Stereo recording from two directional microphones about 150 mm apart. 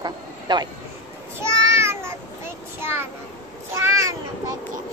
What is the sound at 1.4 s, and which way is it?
Child singing, 15° right (ahead or behind).